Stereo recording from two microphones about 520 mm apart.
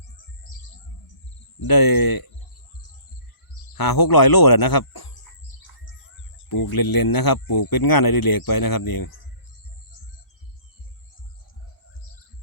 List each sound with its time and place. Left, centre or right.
1.5 s speech: left
3.8 s speech: left
6.5 s speech: left